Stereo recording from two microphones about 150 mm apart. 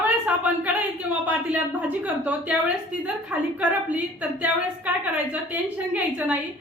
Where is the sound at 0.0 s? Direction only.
10° right (ahead or behind).